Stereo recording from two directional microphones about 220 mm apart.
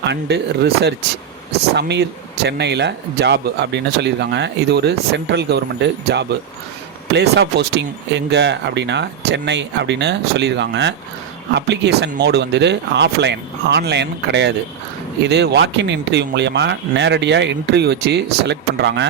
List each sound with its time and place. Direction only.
0.0 s speech: 50° right (ahead or behind)